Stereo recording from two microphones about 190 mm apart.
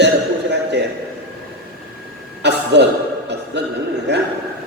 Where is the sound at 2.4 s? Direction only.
65° right (ahead or behind).